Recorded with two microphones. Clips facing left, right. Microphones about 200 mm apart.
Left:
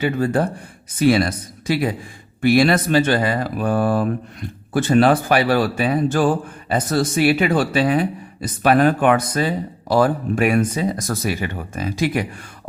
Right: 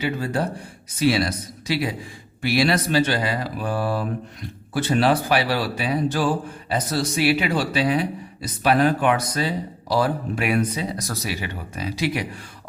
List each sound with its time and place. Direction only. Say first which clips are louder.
0.0 s speech: left 5 dB; 50° left (ahead or behind)